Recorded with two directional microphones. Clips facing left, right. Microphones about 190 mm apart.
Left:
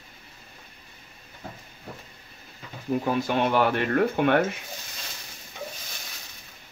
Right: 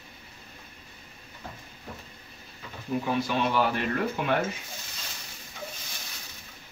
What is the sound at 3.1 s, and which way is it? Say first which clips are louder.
Speech: left 3 dB; 55° left (ahead or behind).